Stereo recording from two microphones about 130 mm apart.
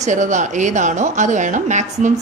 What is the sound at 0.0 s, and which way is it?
Speech, 70° right (ahead or behind).